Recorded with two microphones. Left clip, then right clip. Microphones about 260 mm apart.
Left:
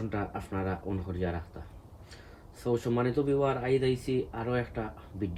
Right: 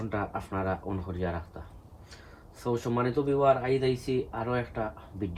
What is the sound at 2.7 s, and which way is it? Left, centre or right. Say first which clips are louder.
Speech: even; centre.